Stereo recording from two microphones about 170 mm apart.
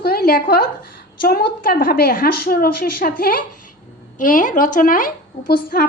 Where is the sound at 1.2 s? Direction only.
60° left (ahead or behind).